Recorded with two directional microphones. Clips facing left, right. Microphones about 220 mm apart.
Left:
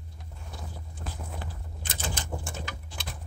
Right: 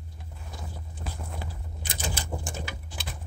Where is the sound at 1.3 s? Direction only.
15° right (ahead or behind).